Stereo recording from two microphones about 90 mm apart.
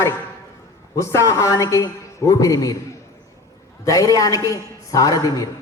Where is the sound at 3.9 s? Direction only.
40° left (ahead or behind).